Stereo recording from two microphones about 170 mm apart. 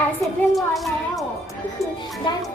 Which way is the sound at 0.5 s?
Centre (ahead or behind).